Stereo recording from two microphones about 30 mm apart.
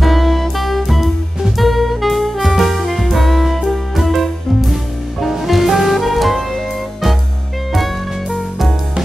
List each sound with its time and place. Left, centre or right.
0.0 s music: centre
1.6 s saxophone: centre
5.3 s music: centre